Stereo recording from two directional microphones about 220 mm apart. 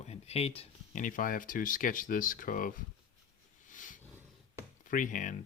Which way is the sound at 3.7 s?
35° left (ahead or behind).